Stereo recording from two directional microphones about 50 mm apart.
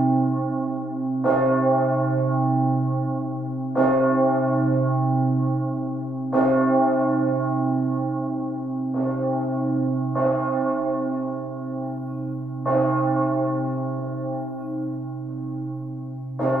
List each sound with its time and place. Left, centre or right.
0.0 s music: centre
1.5 s church bell: centre
3.7 s church bell: centre
5.1 s singing bowl: centre
6.3 s church bell: centre
7.9 s singing bowl: centre
9.0 s church bell: centre
12.6 s church bell: centre